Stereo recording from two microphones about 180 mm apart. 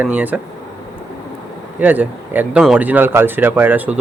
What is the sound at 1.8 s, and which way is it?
Speech, 10° right (ahead or behind).